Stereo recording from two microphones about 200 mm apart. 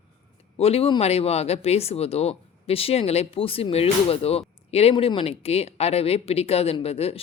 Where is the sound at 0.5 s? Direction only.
30° left (ahead or behind).